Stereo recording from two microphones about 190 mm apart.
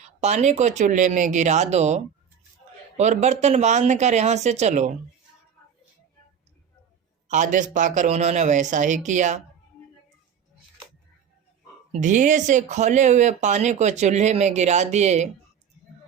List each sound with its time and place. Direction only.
0.2 s speech: 35° right (ahead or behind)
3.0 s speech: 35° right (ahead or behind)
7.3 s speech: 40° right (ahead or behind)
11.9 s speech: 40° right (ahead or behind)